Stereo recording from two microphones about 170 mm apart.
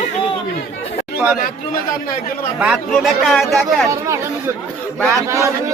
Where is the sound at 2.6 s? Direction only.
5° right (ahead or behind).